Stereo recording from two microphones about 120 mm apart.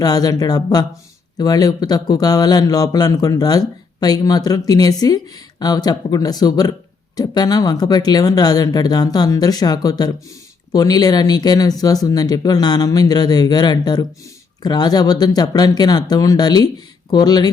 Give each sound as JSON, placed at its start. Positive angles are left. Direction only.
{"t": 0.0, "sound": "speech", "side_deg": 35}